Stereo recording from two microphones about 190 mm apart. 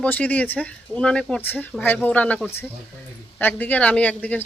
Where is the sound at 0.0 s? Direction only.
10° left (ahead or behind).